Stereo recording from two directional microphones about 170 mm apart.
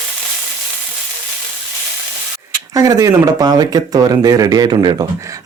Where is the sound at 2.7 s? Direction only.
20° right (ahead or behind).